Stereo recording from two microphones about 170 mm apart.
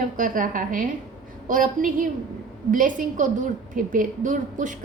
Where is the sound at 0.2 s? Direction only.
55° right (ahead or behind).